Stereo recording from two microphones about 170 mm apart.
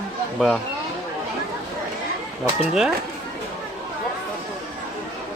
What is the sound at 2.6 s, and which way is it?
Speech, 5° right (ahead or behind).